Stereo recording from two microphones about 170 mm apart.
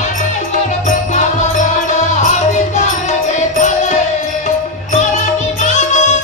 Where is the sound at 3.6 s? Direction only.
45° left (ahead or behind).